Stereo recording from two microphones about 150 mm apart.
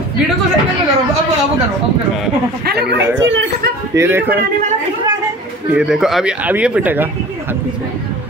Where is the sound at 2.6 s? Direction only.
90° right.